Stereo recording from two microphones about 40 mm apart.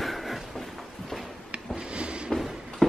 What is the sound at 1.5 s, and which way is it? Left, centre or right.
Rub, right.